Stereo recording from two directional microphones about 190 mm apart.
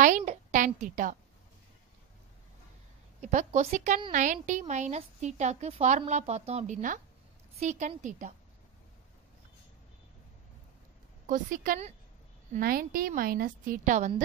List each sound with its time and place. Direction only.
0.0 s a sound: 40° right (ahead or behind)
0.7 s a woman's voice: 40° right (ahead or behind)
3.2 s a woman's voice: 40° right (ahead or behind)
11.2 s a woman's voice: 45° right (ahead or behind)